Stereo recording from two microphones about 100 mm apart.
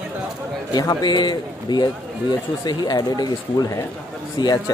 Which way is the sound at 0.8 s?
40° left (ahead or behind).